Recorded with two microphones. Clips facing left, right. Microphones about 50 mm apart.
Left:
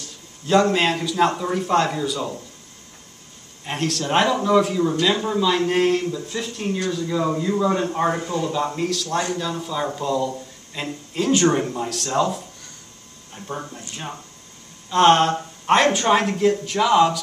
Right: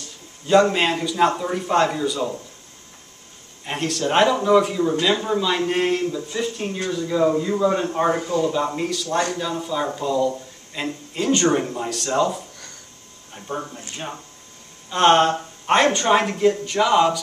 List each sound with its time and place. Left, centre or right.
0.5 s speech: centre
3.6 s a man's voice: centre